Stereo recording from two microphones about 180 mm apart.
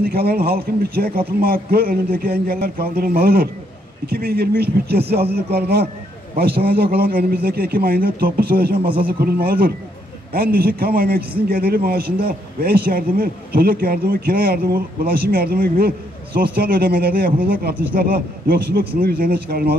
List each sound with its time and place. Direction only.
0.0 s a man's voice: 60° right (ahead or behind)